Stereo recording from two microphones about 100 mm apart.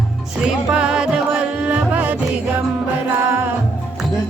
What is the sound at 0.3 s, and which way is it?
Music, 10° right (ahead or behind).